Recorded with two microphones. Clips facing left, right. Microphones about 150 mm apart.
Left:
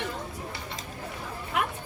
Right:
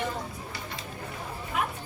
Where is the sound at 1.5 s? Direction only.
75° left (ahead or behind).